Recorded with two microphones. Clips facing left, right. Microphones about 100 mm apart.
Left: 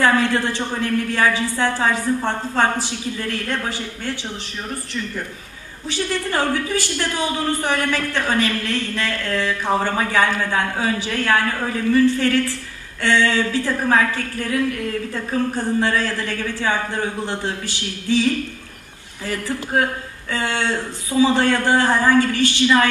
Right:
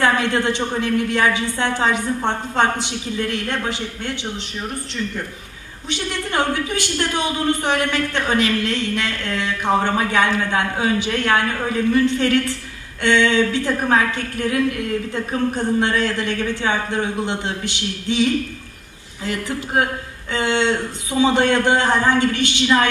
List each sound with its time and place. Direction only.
0.0 s a woman's voice: 20° right (ahead or behind)
5.9 s a woman's voice: 20° right (ahead or behind)